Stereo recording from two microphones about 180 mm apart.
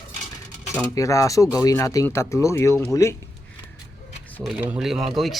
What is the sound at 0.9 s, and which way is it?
Speech, 20° left (ahead or behind).